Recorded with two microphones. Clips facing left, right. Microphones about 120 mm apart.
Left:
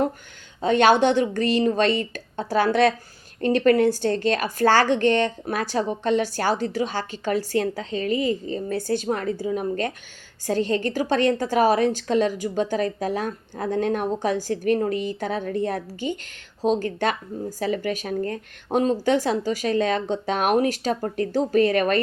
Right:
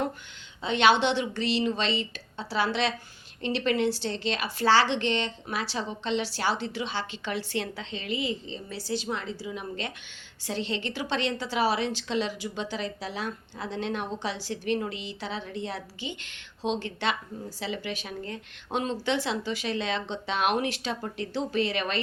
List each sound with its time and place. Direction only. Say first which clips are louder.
0.6 s speech: left 6 dB; 45° left (ahead or behind)